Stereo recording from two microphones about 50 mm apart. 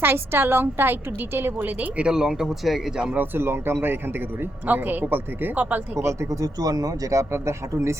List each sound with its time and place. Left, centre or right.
0.0 s a woman's voice: right
2.0 s speech: centre
3.2 s a woman's voice: right
4.6 s speech: right
6.0 s speech: right